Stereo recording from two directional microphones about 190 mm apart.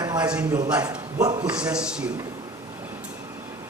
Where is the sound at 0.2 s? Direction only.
5° right (ahead or behind).